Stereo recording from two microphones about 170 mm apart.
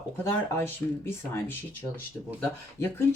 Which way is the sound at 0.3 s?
15° left (ahead or behind).